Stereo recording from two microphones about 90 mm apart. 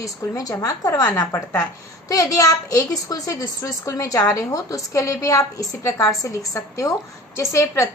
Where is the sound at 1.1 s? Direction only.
30° left (ahead or behind).